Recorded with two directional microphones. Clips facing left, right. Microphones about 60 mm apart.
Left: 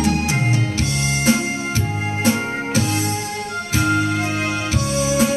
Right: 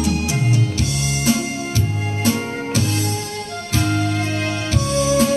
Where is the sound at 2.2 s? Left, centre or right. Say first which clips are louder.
Left 1 dB; left.